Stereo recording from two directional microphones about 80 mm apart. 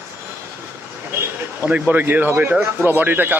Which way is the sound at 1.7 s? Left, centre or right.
Centre.